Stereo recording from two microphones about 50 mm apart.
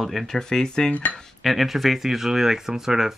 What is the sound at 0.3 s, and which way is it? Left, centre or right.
Speech, centre.